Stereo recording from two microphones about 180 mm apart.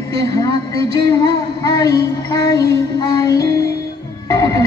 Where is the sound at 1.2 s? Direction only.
25° left (ahead or behind).